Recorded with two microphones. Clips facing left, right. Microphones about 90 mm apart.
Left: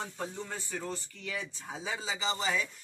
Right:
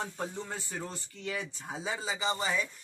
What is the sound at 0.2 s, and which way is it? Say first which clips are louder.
Speech: right 1 dB; 20° right (ahead or behind).